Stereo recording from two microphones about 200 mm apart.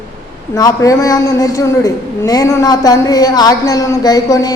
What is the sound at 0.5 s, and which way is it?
A man's voice, 15° left (ahead or behind).